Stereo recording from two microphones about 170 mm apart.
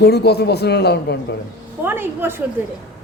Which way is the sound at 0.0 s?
75° left (ahead or behind).